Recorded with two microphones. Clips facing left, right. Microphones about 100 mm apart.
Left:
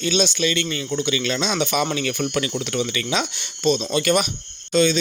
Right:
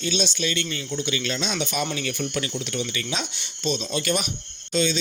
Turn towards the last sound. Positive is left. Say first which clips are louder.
# left 6 dB
turn(degrees=55)  # may be behind; listen again after turning